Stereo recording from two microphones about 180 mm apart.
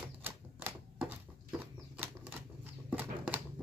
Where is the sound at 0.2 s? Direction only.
10° right (ahead or behind).